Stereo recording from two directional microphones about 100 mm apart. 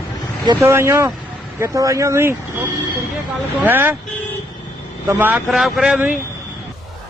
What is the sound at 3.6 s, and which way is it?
Speech, 20° right (ahead or behind).